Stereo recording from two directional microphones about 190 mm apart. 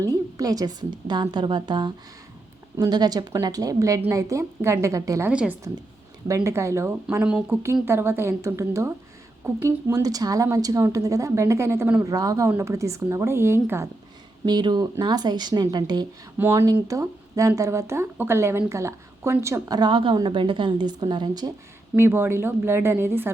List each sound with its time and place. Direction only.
0.0 s a woman's voice: 20° right (ahead or behind)
21.9 s speech: 10° right (ahead or behind)